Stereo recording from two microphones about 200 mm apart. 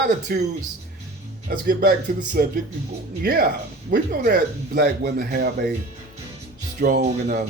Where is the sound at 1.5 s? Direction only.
50° right (ahead or behind).